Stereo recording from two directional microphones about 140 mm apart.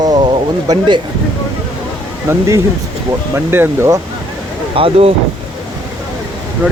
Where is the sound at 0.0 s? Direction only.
30° right (ahead or behind).